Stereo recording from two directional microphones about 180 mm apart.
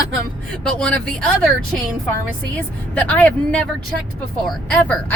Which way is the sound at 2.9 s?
10° left (ahead or behind).